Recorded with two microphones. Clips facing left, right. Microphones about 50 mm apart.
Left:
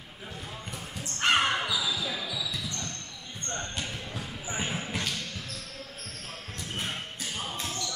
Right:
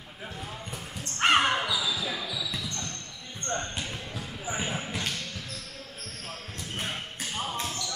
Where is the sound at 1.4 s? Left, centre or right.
Centre.